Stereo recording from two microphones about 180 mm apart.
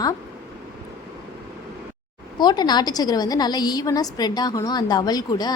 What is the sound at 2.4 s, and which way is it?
A woman's voice, 25° left (ahead or behind).